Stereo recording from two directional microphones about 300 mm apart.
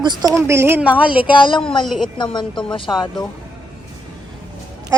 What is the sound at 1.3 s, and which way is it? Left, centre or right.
Speech, centre.